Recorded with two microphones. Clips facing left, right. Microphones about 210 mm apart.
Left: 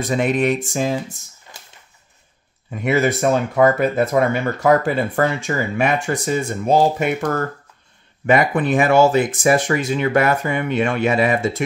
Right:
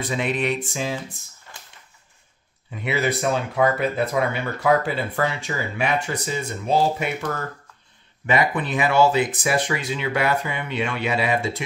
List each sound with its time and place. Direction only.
0.0 s speech: 45° left (ahead or behind)
1.5 s a sound: 15° left (ahead or behind)
2.7 s speech: 45° left (ahead or behind)